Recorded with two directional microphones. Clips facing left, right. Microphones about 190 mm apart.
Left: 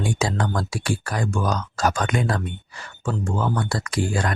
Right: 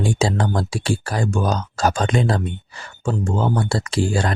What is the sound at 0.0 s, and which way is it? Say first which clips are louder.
Speech: right 4 dB; 30° right (ahead or behind).